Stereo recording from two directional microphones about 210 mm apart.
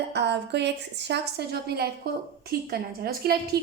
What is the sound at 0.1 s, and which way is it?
A woman's voice, 55° right (ahead or behind).